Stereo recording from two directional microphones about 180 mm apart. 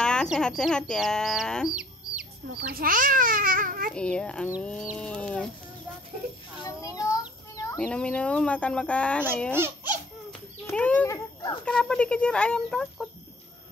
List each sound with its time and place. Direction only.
0.0 s speech: 5° left (ahead or behind)
1.8 s chicken: 5° right (ahead or behind)
2.7 s a child's voice: 50° right (ahead or behind)
3.9 s speech: 5° left (ahead or behind)
6.6 s children playing: 20° left (ahead or behind)
7.7 s speech: 5° left (ahead or behind)
10.7 s a sound: 5° left (ahead or behind)
11.6 s speech: 5° left (ahead or behind)